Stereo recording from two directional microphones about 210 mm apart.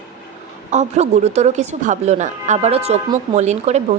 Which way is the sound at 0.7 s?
35° right (ahead or behind).